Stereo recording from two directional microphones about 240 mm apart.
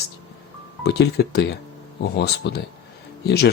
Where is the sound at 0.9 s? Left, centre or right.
Left.